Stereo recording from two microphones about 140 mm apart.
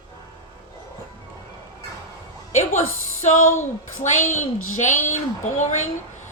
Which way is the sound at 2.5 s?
60° left (ahead or behind).